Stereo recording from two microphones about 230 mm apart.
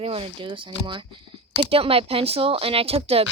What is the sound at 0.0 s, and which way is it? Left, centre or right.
Speech, right.